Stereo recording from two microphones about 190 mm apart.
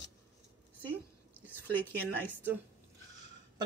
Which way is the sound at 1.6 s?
10° left (ahead or behind).